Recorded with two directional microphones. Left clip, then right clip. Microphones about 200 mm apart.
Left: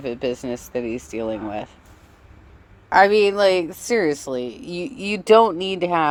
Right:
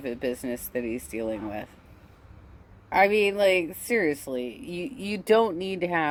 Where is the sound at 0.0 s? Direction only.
20° left (ahead or behind).